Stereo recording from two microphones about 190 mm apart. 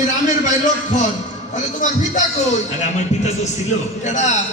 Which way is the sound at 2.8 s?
40° left (ahead or behind).